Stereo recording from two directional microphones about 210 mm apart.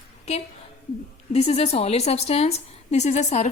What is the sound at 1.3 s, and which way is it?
A woman's voice, 30° left (ahead or behind).